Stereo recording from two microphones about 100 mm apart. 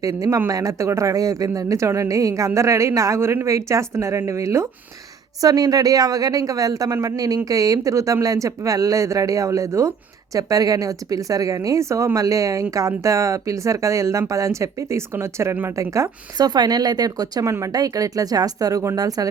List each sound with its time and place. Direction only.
0.0 s speech: 35° right (ahead or behind)